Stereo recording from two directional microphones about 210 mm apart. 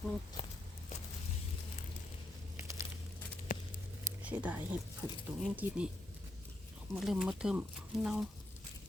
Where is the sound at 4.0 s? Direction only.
5° right (ahead or behind).